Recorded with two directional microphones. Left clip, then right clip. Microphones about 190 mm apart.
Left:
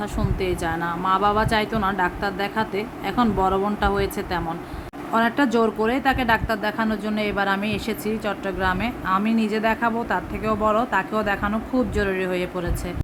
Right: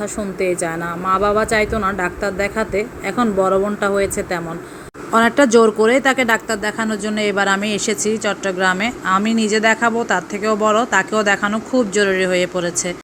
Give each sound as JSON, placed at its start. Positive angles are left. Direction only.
{"t": 0.4, "sound": "a woman's voice", "side_deg": 0}
{"t": 5.1, "sound": "speech", "side_deg": -15}